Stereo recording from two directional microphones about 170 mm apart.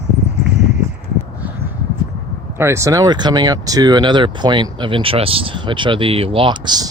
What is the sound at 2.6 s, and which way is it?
Speech, 15° right (ahead or behind).